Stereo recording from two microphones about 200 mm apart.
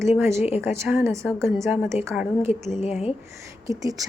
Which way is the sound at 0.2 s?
15° right (ahead or behind).